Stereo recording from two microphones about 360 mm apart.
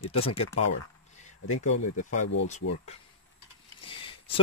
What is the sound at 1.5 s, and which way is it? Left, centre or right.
Speech, left.